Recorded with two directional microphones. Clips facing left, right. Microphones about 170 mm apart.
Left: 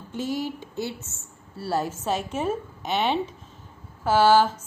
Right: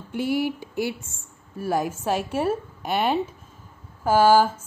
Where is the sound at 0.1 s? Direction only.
15° right (ahead or behind).